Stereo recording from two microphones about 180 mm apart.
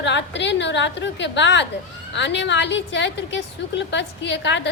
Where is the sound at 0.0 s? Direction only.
75° left (ahead or behind).